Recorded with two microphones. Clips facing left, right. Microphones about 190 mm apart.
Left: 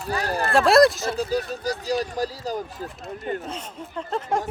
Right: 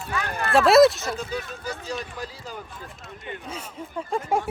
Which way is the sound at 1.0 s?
35° left (ahead or behind).